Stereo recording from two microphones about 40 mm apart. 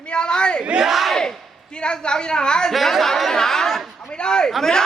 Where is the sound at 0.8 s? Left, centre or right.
Centre.